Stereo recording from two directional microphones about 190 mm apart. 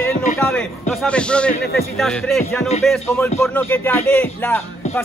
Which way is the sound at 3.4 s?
10° left (ahead or behind).